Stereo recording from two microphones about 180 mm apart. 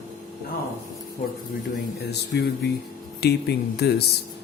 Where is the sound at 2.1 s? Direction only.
65° left (ahead or behind).